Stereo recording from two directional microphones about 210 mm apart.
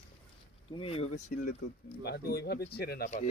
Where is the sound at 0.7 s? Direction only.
25° left (ahead or behind).